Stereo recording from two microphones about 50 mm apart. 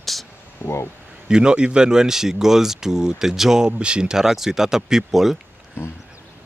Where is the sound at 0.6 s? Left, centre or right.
Left.